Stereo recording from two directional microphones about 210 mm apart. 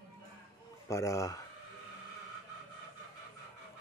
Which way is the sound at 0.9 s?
15° left (ahead or behind).